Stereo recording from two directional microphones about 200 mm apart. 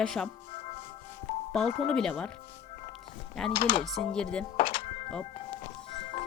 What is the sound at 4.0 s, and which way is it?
Speech, 5° left (ahead or behind).